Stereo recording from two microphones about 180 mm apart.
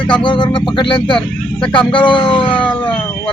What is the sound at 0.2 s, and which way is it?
Speech, 25° left (ahead or behind).